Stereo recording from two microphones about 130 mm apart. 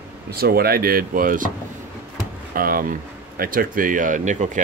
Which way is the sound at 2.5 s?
90° right.